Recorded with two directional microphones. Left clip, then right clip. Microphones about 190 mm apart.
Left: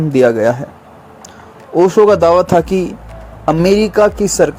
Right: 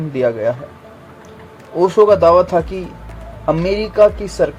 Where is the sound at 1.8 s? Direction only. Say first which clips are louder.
Left 2 dB; 35° left (ahead or behind).